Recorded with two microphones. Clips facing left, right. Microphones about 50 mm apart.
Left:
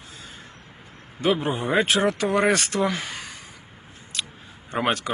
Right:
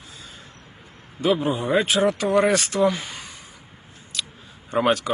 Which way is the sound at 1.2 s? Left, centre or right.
Left.